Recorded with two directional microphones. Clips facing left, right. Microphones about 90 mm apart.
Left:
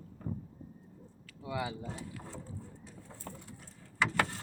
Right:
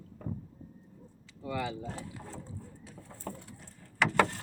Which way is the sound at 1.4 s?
10° left (ahead or behind).